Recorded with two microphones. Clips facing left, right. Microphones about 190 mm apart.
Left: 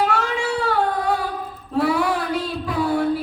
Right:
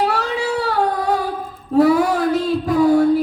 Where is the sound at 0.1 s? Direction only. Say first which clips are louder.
Right 1 dB; 35° right (ahead or behind).